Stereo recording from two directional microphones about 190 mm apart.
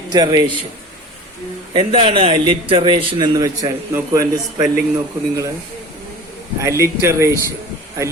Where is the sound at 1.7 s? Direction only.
30° right (ahead or behind).